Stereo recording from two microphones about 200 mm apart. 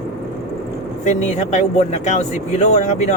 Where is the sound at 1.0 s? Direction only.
35° left (ahead or behind).